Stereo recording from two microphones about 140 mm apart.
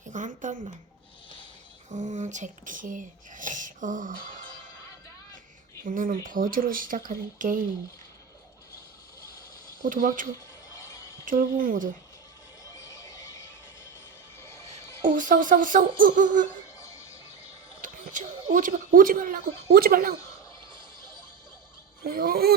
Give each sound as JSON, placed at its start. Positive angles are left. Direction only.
{"t": 0.0, "sound": "a sound", "side_deg": -65}
{"t": 1.9, "sound": "speech", "side_deg": -60}
{"t": 5.8, "sound": "speech", "side_deg": -75}
{"t": 9.8, "sound": "speech", "side_deg": -70}
{"t": 10.8, "sound": "a sound", "side_deg": 25}
{"t": 11.3, "sound": "speech", "side_deg": -75}
{"t": 12.6, "sound": "music", "side_deg": 20}
{"t": 14.5, "sound": "music", "side_deg": 20}
{"t": 15.0, "sound": "speech", "side_deg": -70}
{"t": 16.7, "sound": "music", "side_deg": 25}
{"t": 17.8, "sound": "speech", "side_deg": -70}
{"t": 22.0, "sound": "speech", "side_deg": -90}